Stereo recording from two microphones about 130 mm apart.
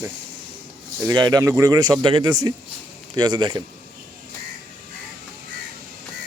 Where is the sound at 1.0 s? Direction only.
30° right (ahead or behind).